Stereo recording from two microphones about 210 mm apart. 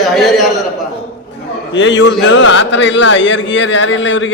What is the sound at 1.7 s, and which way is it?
A man's voice, 60° left (ahead or behind).